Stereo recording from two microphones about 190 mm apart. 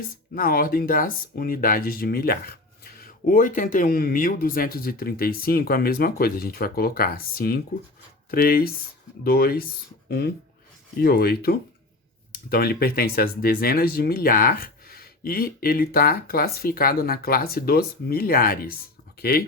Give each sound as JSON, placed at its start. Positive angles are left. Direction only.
{"t": 0.3, "sound": "speech", "side_deg": 50}